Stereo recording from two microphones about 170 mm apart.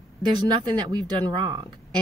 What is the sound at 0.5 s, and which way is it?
A woman's voice, 25° right (ahead or behind).